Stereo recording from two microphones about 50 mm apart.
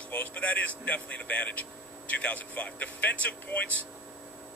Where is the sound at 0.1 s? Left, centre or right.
Left.